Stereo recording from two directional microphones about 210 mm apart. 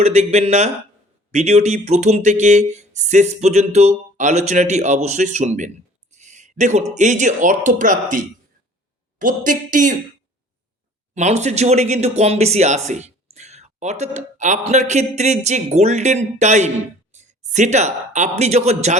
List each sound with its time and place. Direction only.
0.0 s speech: 30° right (ahead or behind)
11.1 s speech: 35° right (ahead or behind)